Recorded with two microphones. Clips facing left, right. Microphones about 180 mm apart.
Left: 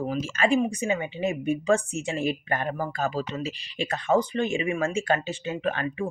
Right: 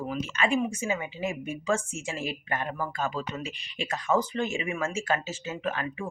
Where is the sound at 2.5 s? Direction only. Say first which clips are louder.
Left 3 dB; 40° left (ahead or behind).